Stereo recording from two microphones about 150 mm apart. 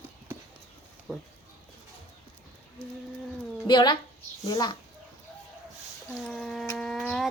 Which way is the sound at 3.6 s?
30° left (ahead or behind).